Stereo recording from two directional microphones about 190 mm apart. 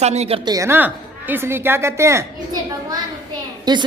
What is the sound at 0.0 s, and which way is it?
Speech, 35° right (ahead or behind).